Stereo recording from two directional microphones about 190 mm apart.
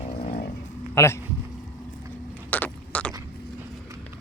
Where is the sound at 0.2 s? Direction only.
45° left (ahead or behind).